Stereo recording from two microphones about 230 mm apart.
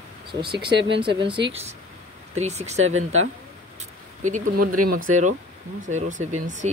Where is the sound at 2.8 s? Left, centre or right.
Right.